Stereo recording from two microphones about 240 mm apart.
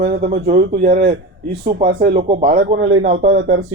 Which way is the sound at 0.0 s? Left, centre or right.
Right.